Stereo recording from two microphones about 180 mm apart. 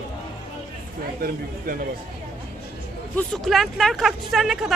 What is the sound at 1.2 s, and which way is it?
Speech, 50° right (ahead or behind).